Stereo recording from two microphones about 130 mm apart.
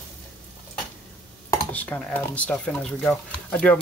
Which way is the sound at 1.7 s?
15° left (ahead or behind).